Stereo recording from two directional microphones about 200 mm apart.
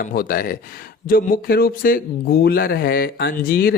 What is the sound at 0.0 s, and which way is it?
Speech, 45° left (ahead or behind).